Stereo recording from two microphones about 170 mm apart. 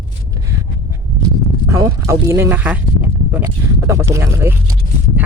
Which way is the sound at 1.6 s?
20° right (ahead or behind).